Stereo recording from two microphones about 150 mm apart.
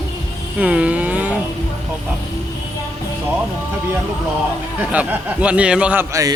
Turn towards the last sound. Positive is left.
turn(degrees=-20)  # may be behind; listen again after turning